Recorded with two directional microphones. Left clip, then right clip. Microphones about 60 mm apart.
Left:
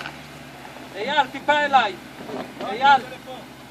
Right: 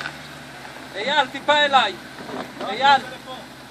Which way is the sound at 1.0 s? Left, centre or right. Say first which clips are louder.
Right 1 dB; right.